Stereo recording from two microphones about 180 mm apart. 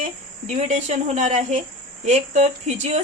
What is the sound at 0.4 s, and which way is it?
A woman's voice, 35° right (ahead or behind).